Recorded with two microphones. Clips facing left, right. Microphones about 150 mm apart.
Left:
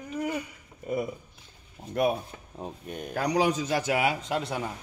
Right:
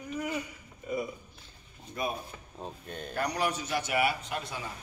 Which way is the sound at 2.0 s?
65° left (ahead or behind).